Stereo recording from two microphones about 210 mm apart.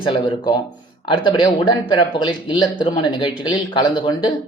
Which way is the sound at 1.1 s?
25° left (ahead or behind).